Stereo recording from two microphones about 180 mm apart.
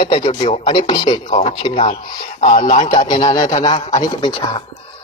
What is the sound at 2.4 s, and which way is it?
Speech, 40° left (ahead or behind).